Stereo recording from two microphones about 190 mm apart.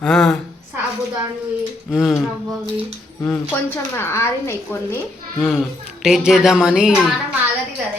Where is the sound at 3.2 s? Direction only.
10° left (ahead or behind).